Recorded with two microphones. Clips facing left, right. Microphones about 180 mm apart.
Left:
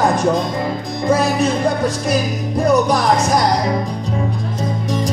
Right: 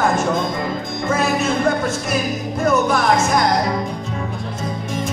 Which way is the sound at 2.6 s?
35° left (ahead or behind).